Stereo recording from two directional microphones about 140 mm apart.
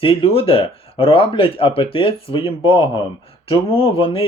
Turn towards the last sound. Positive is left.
turn(degrees=40)  # may be behind; listen again after turning